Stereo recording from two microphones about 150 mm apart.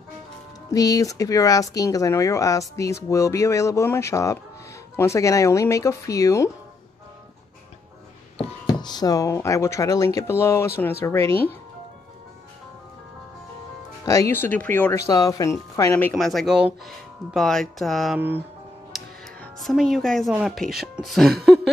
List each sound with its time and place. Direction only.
0.7 s speech: 25° left (ahead or behind)
8.6 s speech: 30° left (ahead or behind)
14.0 s speech: 20° left (ahead or behind)
16.2 s speech: centre (ahead or behind)
19.4 s a woman's voice: centre (ahead or behind)